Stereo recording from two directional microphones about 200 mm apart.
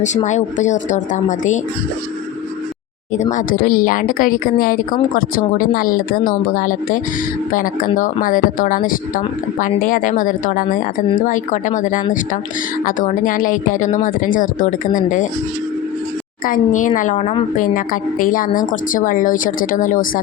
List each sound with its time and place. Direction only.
0.3 s a woman's voice: 35° left (ahead or behind)
3.3 s a woman's voice: 45° left (ahead or behind)
16.5 s a woman's voice: 40° left (ahead or behind)